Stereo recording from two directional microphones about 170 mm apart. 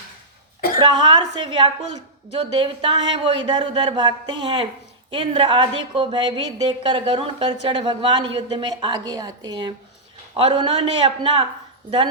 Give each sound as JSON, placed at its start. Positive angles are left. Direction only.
{"t": 0.8, "sound": "speech", "side_deg": -25}